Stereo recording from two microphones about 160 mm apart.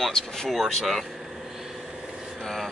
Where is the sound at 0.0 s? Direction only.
5° left (ahead or behind).